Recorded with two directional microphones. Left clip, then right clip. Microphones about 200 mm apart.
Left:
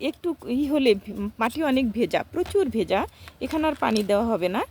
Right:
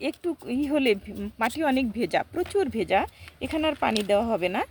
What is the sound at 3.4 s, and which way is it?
Speech, 20° left (ahead or behind).